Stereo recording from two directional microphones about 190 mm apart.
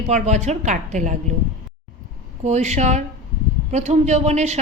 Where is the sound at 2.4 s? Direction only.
35° right (ahead or behind).